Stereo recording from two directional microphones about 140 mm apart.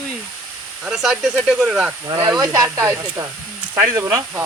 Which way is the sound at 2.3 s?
30° right (ahead or behind).